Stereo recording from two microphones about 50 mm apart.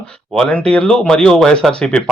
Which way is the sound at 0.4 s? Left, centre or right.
Left.